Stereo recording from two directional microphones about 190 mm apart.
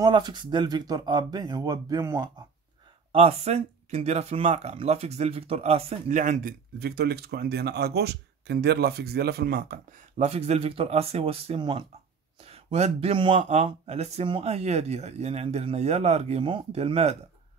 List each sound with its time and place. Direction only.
0.0 s speech: 20° right (ahead or behind)
3.1 s speech: 30° right (ahead or behind); by 10.2 s 50° right (ahead or behind)
10.2 s speech: 35° right (ahead or behind)